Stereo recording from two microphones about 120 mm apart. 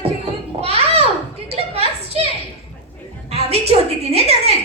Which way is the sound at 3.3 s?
60° right (ahead or behind).